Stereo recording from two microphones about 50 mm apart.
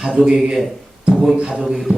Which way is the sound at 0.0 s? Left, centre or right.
Centre.